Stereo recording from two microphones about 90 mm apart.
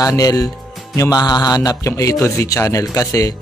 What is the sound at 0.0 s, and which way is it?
Music, 40° left (ahead or behind).